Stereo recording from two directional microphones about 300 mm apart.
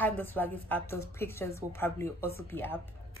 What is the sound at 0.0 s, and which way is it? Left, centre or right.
Speech, centre.